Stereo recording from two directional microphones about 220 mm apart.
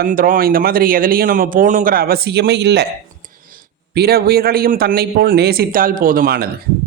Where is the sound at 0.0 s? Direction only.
40° right (ahead or behind).